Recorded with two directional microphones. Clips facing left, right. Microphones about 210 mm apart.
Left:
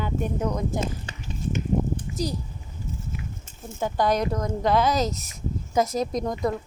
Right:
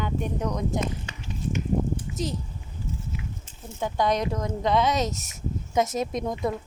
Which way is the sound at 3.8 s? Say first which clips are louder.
Left 1 dB; centre (ahead or behind).